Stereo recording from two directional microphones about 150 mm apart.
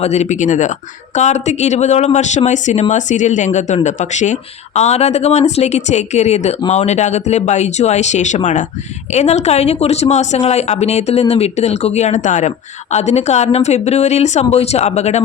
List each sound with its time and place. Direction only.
0.0 s a woman's voice: 45° left (ahead or behind)